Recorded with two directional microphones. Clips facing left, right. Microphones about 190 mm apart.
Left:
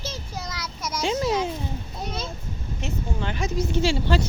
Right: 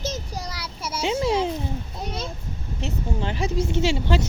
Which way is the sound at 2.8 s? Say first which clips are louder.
Right 2 dB; 30° right (ahead or behind).